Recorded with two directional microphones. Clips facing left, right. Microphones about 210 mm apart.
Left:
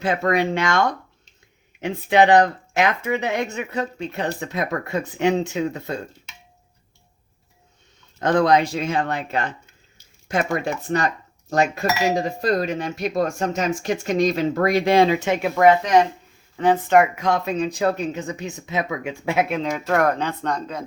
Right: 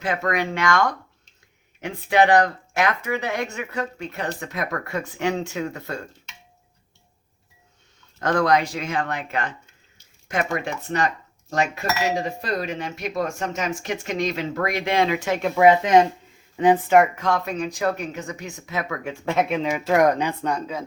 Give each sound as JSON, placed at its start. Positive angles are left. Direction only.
{"t": 0.0, "sound": "speech", "side_deg": 30}
{"t": 8.2, "sound": "speech", "side_deg": 20}
{"t": 15.5, "sound": "speech", "side_deg": -10}
{"t": 15.8, "sound": "speech", "side_deg": -25}
{"t": 17.2, "sound": "speech", "side_deg": 20}
{"t": 19.9, "sound": "speech", "side_deg": -15}